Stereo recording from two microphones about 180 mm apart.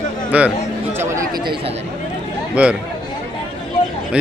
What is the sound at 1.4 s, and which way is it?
Speech, 25° right (ahead or behind).